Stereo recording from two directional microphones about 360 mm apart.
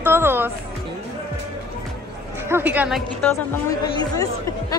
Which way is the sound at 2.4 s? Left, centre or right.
Centre.